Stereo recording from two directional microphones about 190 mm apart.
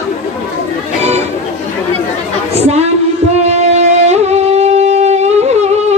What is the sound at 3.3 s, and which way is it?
Wind instrument, 35° right (ahead or behind).